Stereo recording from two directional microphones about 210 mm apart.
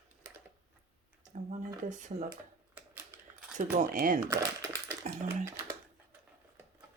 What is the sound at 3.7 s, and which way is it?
Speech, 40° right (ahead or behind).